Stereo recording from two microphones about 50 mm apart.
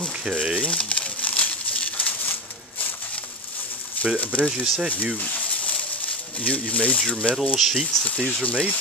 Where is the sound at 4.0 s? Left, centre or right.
Left.